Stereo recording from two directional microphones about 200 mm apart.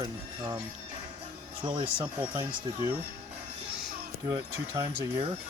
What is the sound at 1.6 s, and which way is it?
Speech, 25° right (ahead or behind).